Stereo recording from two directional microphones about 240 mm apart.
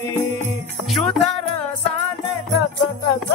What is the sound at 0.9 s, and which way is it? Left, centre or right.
Music, centre.